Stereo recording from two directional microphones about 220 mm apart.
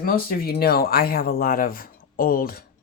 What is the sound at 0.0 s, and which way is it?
Speech, 40° left (ahead or behind).